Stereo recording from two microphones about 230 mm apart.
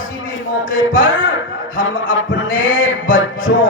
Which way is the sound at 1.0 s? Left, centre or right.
Left.